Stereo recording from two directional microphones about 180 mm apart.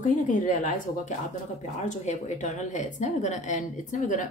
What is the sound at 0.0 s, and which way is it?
A woman's voice, 45° left (ahead or behind).